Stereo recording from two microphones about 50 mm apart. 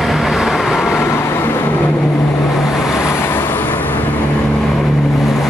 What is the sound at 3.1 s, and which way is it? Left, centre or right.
Vehicle, left.